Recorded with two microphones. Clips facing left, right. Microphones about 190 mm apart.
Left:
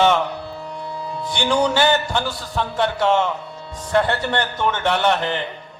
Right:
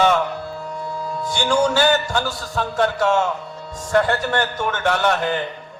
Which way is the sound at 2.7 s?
25° left (ahead or behind).